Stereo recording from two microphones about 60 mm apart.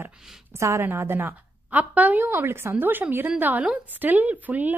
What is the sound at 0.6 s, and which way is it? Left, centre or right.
Speech, right.